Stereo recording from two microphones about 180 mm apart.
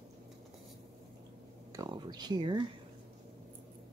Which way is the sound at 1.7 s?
20° right (ahead or behind).